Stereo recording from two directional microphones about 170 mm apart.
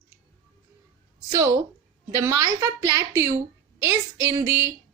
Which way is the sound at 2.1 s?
20° right (ahead or behind).